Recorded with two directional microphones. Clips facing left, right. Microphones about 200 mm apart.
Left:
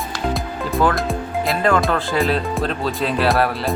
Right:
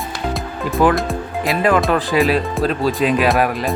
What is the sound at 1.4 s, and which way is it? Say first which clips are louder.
Music: right 2 dB; 15° right (ahead or behind).